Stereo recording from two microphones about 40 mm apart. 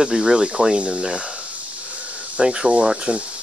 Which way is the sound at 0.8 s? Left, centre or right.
Right.